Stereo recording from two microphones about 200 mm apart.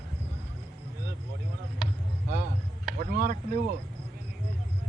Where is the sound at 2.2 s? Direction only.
45° right (ahead or behind).